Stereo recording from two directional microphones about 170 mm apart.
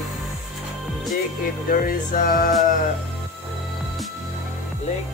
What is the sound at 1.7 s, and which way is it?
Music, 55° left (ahead or behind).